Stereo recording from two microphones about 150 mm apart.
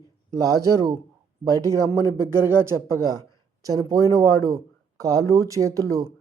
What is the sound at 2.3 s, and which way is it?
Speech, 15° right (ahead or behind).